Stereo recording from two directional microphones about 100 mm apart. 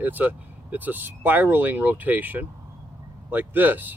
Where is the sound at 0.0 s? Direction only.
15° right (ahead or behind).